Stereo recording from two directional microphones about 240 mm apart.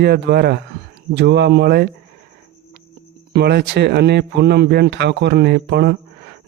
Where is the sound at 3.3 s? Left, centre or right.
Right.